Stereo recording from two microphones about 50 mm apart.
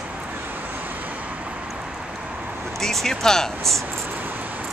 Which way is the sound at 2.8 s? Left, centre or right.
Centre.